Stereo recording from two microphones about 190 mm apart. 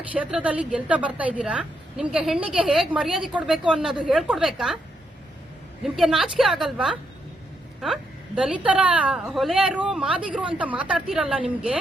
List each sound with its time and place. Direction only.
0.1 s a woman's voice: 5° right (ahead or behind)
5.8 s a woman's voice: centre (ahead or behind)
8.4 s a woman's voice: 5° right (ahead or behind)